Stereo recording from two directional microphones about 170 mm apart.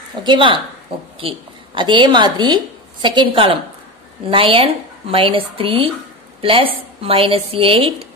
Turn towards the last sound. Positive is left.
turn(degrees=-35)  # may be behind; listen again after turning